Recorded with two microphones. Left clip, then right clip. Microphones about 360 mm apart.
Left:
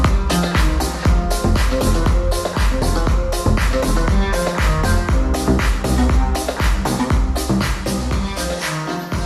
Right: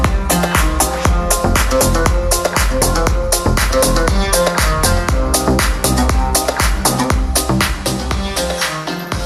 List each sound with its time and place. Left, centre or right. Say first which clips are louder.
0.0 s music: right 3 dB; centre
3.5 s music: right 8 dB; right